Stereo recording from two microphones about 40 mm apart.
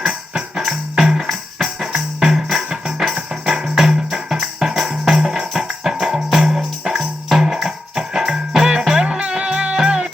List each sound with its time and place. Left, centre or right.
0.0 s music: centre